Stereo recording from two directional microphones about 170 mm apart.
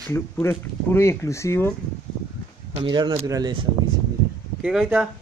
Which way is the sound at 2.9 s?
25° right (ahead or behind).